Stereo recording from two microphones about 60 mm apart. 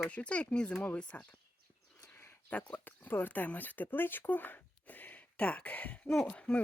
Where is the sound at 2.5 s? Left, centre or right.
Left.